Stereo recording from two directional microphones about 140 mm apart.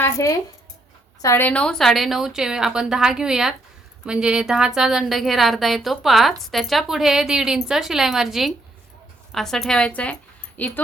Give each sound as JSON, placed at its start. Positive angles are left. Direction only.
{"t": 0.0, "sound": "a woman's voice", "side_deg": 25}